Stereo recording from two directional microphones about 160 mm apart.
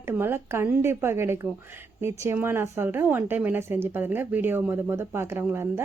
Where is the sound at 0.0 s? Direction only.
15° right (ahead or behind).